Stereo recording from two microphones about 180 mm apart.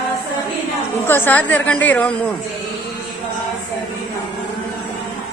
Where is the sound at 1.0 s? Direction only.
10° left (ahead or behind).